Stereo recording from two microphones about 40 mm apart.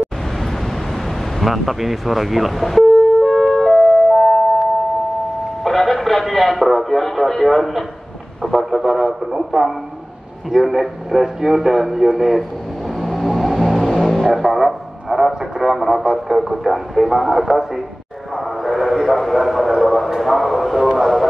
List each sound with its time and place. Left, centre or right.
1.4 s foghorn: centre
5.6 s music: centre
8.5 s speech: centre
13.0 s vehicle: centre
14.2 s speech: centre
18.3 s a sound: centre